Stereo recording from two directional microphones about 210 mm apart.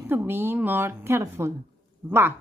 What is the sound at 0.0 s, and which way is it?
Speech, 10° right (ahead or behind).